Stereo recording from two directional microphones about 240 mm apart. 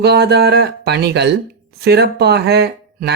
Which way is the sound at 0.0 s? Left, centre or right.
Right.